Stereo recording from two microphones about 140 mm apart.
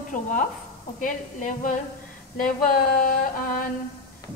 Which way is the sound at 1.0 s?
70° left (ahead or behind).